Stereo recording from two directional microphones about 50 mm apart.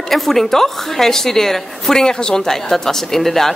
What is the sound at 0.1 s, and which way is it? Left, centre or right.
A woman's voice, centre.